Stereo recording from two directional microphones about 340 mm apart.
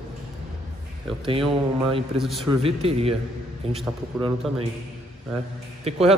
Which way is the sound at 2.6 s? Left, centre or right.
Centre.